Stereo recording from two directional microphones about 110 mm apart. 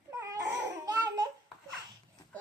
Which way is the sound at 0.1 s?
25° right (ahead or behind).